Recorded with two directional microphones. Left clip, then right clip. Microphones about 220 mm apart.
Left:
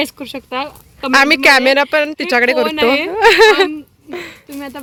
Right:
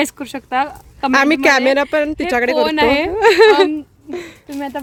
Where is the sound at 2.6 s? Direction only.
35° right (ahead or behind).